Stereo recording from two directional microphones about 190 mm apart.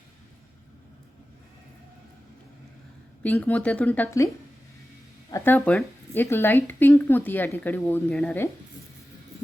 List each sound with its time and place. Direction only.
3.2 s speech: 10° left (ahead or behind)
5.3 s speech: 10° left (ahead or behind)